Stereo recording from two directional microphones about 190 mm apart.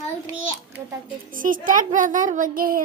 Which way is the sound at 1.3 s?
45° right (ahead or behind).